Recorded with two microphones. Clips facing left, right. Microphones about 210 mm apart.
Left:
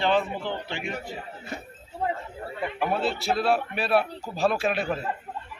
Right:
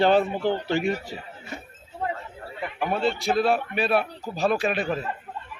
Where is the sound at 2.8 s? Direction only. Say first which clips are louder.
Right 2 dB; 5° left (ahead or behind).